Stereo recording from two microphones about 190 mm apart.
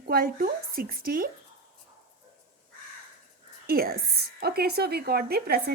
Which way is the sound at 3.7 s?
50° right (ahead or behind).